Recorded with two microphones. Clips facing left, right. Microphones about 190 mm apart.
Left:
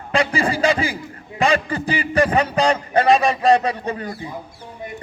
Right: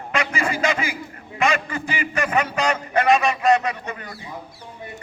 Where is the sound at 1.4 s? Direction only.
35° left (ahead or behind).